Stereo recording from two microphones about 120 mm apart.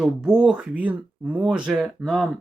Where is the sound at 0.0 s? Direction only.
5° right (ahead or behind).